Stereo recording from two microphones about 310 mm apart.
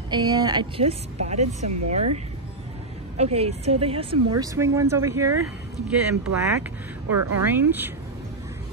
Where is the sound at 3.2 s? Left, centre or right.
Centre.